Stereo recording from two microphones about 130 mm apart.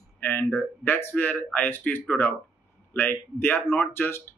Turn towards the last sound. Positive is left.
turn(degrees=15)  # may be behind; listen again after turning